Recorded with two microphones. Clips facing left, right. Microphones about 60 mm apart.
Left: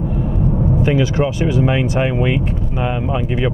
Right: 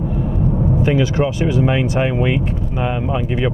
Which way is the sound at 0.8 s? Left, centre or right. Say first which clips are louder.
Even; centre.